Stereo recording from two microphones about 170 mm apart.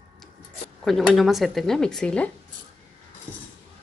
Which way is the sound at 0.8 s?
Centre (ahead or behind).